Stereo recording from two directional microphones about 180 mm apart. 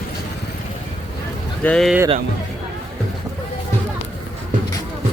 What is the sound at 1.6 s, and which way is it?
Speech, 5° left (ahead or behind).